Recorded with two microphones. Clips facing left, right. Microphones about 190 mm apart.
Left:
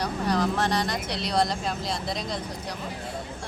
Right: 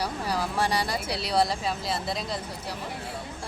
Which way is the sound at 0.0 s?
5° right (ahead or behind).